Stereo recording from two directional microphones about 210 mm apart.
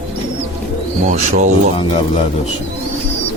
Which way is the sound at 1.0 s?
35° right (ahead or behind).